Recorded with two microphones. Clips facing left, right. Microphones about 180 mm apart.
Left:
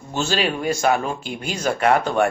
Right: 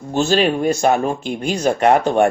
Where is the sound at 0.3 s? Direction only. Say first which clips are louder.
Right 6 dB; 40° right (ahead or behind).